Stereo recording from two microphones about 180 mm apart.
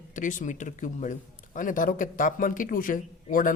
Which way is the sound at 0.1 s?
45° left (ahead or behind).